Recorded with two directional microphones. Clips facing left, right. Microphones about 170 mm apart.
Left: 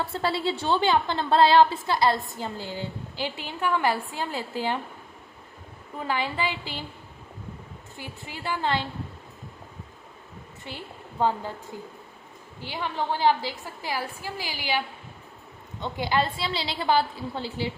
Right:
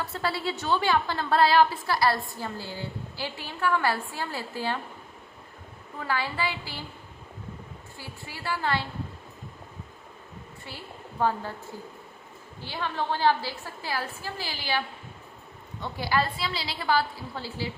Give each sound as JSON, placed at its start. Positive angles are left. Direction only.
{"t": 0.0, "sound": "a woman's voice", "side_deg": 25}
{"t": 6.0, "sound": "a woman's voice", "side_deg": 20}
{"t": 7.9, "sound": "a woman's voice", "side_deg": 20}
{"t": 10.7, "sound": "a woman's voice", "side_deg": 20}
{"t": 12.6, "sound": "a woman's voice", "side_deg": 15}